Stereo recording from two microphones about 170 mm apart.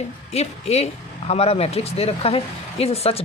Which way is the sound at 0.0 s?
40° left (ahead or behind).